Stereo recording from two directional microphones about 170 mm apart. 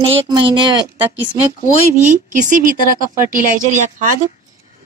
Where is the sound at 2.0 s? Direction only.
50° right (ahead or behind).